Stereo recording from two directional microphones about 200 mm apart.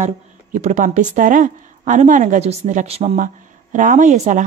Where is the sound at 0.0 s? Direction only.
35° right (ahead or behind).